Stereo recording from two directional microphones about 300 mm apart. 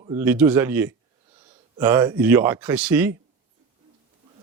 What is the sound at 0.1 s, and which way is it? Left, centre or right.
A man's voice, centre.